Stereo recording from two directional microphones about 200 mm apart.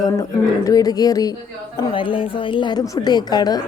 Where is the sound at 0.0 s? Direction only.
15° left (ahead or behind).